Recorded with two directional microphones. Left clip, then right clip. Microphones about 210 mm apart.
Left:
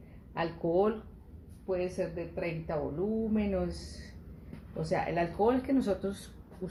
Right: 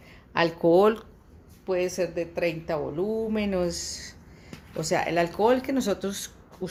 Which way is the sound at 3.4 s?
50° right (ahead or behind).